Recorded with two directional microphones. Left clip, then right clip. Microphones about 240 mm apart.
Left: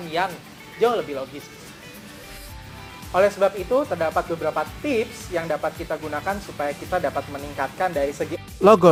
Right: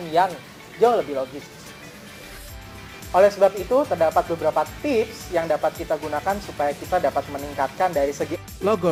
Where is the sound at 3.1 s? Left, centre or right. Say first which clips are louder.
Right 3 dB; centre.